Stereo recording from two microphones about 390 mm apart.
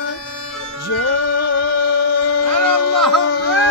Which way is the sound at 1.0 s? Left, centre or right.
Left.